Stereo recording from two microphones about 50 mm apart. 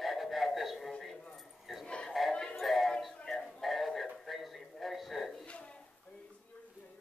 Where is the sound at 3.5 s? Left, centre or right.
Centre.